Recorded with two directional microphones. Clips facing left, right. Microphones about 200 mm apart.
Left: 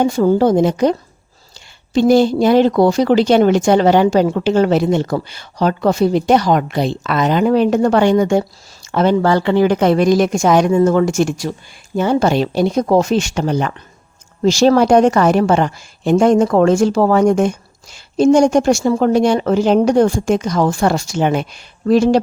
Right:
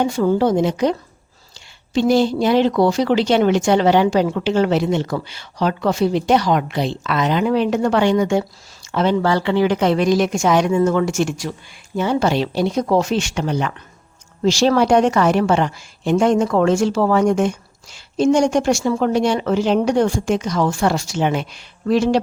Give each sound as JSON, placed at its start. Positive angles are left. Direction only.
{"t": 0.0, "sound": "a woman's voice", "side_deg": 40}